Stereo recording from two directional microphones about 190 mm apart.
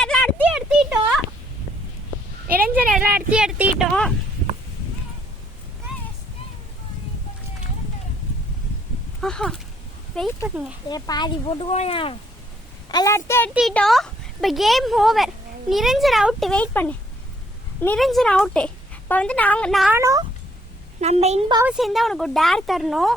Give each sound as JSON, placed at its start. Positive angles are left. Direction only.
{"t": 0.0, "sound": "a sound", "side_deg": 5}
{"t": 2.6, "sound": "speech", "side_deg": -5}
{"t": 9.2, "sound": "a woman's voice", "side_deg": 5}
{"t": 10.8, "sound": "speech", "side_deg": 20}
{"t": 12.9, "sound": "a woman's voice", "side_deg": 20}
{"t": 13.5, "sound": "a woman's voice", "side_deg": 0}
{"t": 19.9, "sound": "speech", "side_deg": -15}
{"t": 21.0, "sound": "a woman's voice", "side_deg": -35}
{"t": 21.7, "sound": "a woman's voice", "side_deg": 0}